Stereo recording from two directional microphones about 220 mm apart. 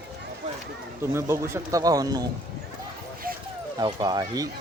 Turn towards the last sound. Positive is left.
turn(degrees=-15)  # may be behind; listen again after turning